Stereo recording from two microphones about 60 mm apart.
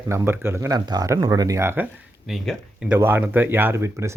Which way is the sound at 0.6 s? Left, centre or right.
Right.